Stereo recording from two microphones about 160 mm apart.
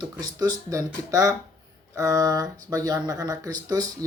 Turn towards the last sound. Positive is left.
turn(degrees=-20)  # may be behind; listen again after turning